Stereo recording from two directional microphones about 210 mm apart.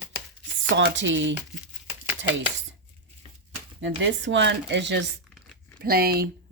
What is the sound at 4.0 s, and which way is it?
Speech, 60° right (ahead or behind).